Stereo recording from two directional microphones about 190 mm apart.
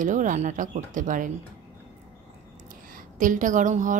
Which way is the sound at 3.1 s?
45° right (ahead or behind).